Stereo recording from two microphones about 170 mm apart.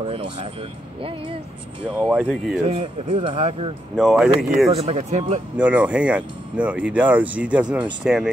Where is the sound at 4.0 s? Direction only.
Centre (ahead or behind).